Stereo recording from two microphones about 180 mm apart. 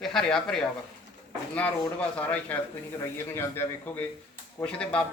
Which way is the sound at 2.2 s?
10° left (ahead or behind).